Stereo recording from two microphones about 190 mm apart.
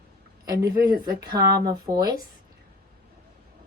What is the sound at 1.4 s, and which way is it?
Speech, 55° right (ahead or behind).